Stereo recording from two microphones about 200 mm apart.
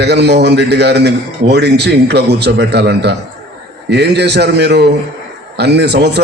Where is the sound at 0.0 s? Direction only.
55° right (ahead or behind).